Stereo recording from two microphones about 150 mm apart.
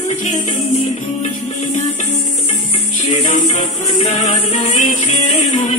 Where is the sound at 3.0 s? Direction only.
45° left (ahead or behind).